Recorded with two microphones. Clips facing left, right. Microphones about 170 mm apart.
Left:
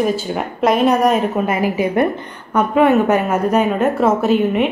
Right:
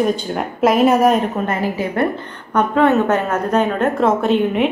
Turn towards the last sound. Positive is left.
turn(degrees=0)  # may be behind; listen again after turning